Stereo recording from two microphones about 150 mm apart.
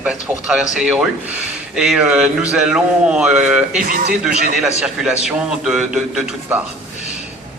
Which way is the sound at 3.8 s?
70° right (ahead or behind).